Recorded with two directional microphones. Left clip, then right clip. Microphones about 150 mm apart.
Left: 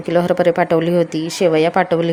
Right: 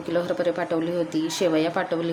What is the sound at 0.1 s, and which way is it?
A woman's voice, 50° left (ahead or behind).